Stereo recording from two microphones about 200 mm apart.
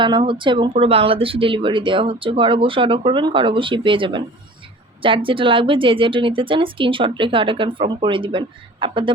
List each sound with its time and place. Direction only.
0.0 s speech: 25° right (ahead or behind)